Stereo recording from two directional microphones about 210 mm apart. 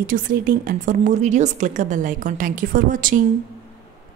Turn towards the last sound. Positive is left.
turn(degrees=-40)  # may be behind; listen again after turning